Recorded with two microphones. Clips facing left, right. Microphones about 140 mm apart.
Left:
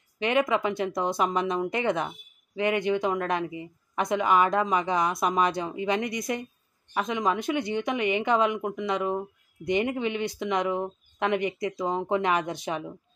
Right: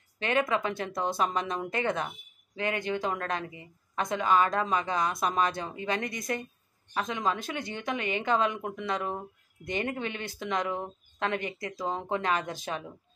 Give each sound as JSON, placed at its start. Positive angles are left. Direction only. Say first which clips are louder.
{"t": 0.2, "sound": "a woman's voice", "louder": "left 3 dB", "side_deg": 15}